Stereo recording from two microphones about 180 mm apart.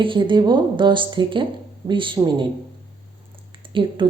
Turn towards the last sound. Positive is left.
turn(degrees=-30)  # may be behind; listen again after turning